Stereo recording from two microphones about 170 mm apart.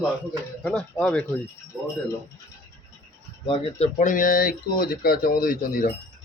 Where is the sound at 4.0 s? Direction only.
50° left (ahead or behind).